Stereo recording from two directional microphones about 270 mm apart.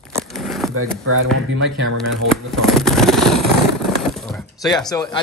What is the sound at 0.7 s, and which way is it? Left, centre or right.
Speech, right.